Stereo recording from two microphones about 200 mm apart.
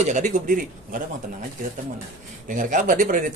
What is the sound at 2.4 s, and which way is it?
Speech, 40° right (ahead or behind).